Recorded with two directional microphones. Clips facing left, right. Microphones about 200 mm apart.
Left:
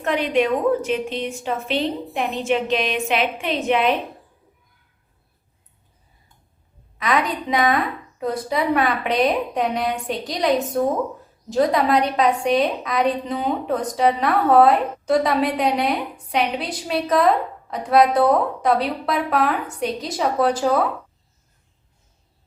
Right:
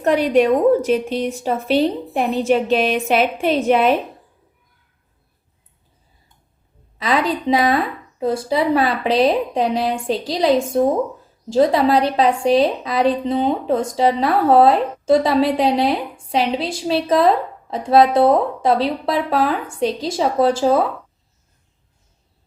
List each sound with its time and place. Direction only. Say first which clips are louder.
0.0 s a woman's voice: right 5 dB; 40° right (ahead or behind)
7.0 s a woman's voice: right 3 dB; 30° right (ahead or behind)